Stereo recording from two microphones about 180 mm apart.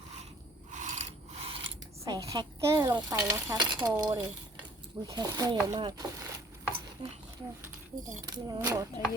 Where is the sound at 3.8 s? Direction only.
20° right (ahead or behind).